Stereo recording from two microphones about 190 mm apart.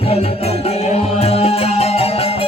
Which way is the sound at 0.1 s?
30° left (ahead or behind).